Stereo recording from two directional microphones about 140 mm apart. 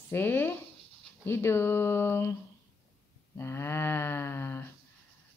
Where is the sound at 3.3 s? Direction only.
20° left (ahead or behind).